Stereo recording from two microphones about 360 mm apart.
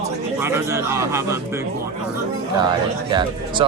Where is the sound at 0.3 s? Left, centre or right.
Centre.